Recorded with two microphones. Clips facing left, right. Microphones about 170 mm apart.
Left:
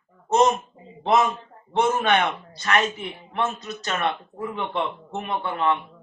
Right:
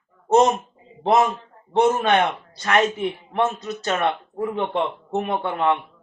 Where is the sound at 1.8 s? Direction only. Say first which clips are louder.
Right 3 dB; 40° right (ahead or behind).